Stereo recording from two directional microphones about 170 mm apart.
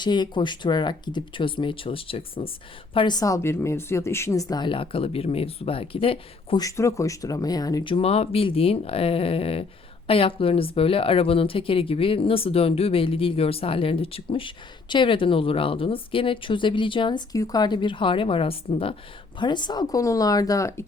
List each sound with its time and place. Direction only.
0.0 s speech: 25° left (ahead or behind)
6.6 s speech: 20° left (ahead or behind)